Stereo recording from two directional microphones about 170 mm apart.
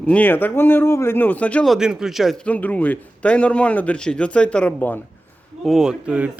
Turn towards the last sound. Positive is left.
turn(degrees=-5)  # may be behind; listen again after turning